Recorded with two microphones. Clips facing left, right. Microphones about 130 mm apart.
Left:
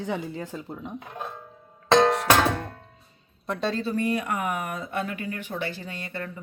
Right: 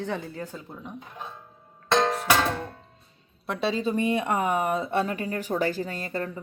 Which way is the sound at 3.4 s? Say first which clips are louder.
Right 1 dB; 5° right (ahead or behind).